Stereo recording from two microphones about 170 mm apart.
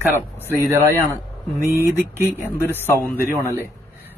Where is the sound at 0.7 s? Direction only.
15° right (ahead or behind).